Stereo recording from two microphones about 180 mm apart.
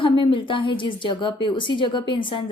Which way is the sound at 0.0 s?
30° left (ahead or behind).